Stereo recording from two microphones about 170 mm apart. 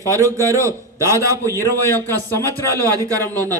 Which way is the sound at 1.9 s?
15° left (ahead or behind).